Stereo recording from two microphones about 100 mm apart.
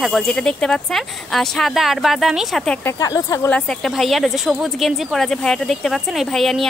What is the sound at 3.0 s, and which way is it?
Speech, 35° left (ahead or behind).